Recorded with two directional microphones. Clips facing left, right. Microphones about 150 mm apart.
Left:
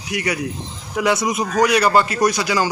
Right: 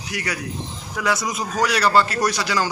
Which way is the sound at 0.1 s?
20° left (ahead or behind).